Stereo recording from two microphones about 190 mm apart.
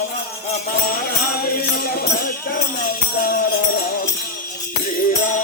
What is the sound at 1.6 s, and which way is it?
Music, 50° left (ahead or behind).